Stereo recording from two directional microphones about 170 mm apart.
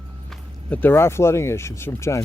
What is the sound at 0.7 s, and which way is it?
Speech, 10° left (ahead or behind).